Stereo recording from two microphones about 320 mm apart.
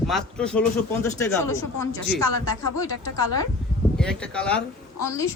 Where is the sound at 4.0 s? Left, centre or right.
Centre.